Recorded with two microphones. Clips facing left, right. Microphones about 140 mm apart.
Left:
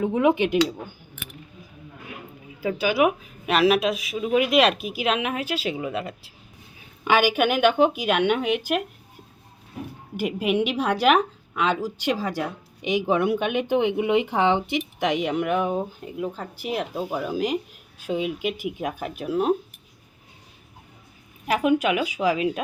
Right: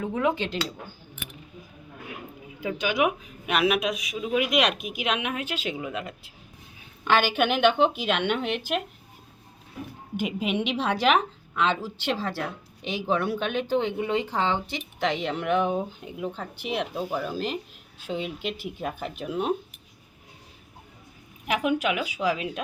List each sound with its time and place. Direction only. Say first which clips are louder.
0.0 s a woman's voice: left 6 dB; 20° left (ahead or behind)
2.6 s a woman's voice: left 4 dB; 5° left (ahead or behind)
10.2 s a woman's voice: left 4 dB; 5° left (ahead or behind)
21.4 s speech: left 4 dB; 5° left (ahead or behind)